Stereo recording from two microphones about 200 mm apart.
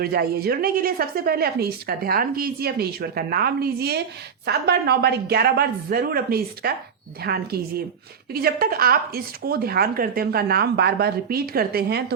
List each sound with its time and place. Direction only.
0.0 s a woman's voice: 50° right (ahead or behind)